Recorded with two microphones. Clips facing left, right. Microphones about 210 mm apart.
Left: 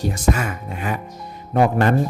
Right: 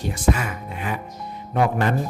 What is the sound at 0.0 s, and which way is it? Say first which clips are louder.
Speech: left 2 dB; 45° left (ahead or behind).